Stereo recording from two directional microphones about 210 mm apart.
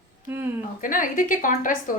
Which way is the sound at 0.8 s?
40° left (ahead or behind).